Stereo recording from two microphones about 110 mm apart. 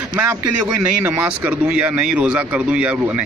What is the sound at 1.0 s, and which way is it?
Speech, 15° right (ahead or behind).